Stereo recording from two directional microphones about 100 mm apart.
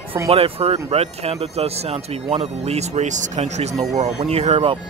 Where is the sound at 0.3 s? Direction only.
80° right.